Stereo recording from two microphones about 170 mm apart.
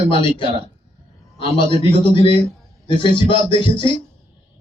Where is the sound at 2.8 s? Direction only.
30° left (ahead or behind).